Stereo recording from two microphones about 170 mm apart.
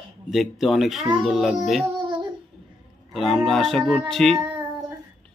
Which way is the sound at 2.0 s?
25° right (ahead or behind).